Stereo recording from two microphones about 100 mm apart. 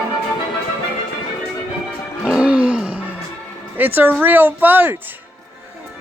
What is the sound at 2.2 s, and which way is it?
Music, 10° right (ahead or behind).